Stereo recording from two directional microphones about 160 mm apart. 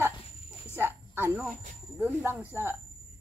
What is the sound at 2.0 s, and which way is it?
Speech, 10° right (ahead or behind).